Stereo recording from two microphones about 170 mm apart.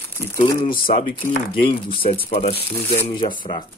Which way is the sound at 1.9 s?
35° left (ahead or behind).